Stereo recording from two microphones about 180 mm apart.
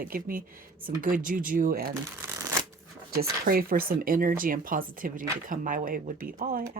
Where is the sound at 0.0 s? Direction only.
50° right (ahead or behind).